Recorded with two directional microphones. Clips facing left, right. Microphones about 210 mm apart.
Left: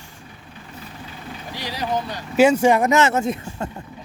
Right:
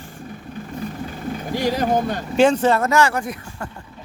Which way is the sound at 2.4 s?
10° left (ahead or behind).